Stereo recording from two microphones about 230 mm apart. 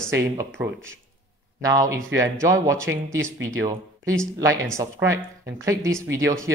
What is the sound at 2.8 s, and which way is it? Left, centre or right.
Speech, right.